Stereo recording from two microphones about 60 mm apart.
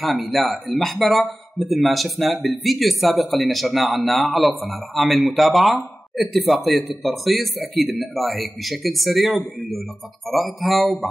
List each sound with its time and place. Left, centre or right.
0.0 s speech: centre